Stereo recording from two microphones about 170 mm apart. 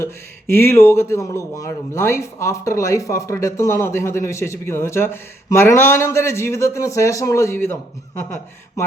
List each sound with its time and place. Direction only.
0.0 s speech: 15° left (ahead or behind)